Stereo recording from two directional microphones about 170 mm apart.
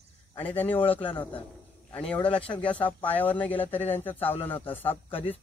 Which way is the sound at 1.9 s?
10° left (ahead or behind).